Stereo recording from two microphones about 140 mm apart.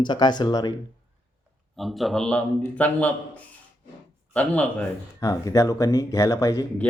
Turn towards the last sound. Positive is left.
turn(degrees=25)  # may be behind; listen again after turning